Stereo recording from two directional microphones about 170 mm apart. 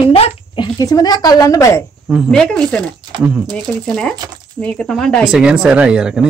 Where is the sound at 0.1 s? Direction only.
25° left (ahead or behind).